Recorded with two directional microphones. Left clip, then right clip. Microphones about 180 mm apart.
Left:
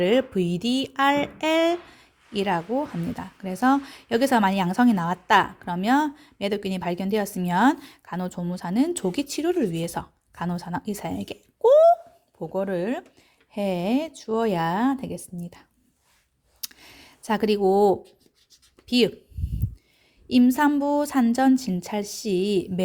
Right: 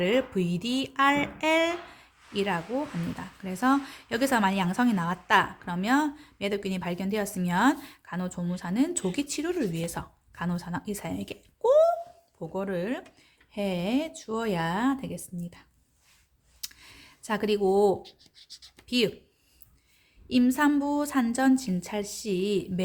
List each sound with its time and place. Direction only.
0.0 s speech: 30° left (ahead or behind)
16.6 s computer keyboard: 35° left (ahead or behind)
18.0 s scratch: 10° right (ahead or behind)
18.9 s speech: 35° left (ahead or behind)
20.2 s speech: 30° left (ahead or behind)